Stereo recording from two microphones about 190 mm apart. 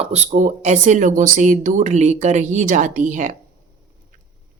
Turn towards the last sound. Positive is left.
turn(degrees=-40)  # may be behind; listen again after turning